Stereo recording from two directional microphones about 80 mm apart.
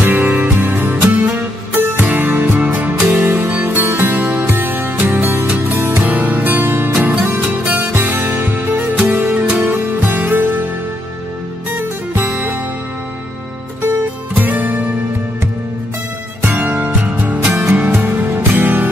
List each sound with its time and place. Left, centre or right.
0.0 s music: right
12.1 s music: right
14.3 s music: right
16.4 s music: right